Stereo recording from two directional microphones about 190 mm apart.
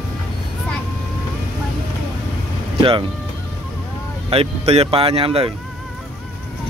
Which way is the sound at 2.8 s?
25° right (ahead or behind).